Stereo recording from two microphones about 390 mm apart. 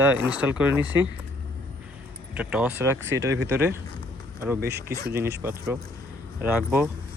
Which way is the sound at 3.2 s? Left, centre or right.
Right.